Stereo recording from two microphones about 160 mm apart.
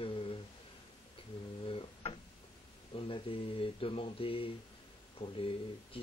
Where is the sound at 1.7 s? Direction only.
35° left (ahead or behind).